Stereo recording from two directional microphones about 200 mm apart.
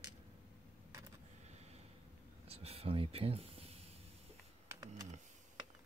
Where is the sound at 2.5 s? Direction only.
30° right (ahead or behind).